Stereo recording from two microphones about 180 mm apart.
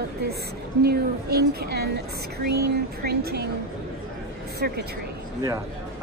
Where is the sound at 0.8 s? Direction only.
60° right (ahead or behind).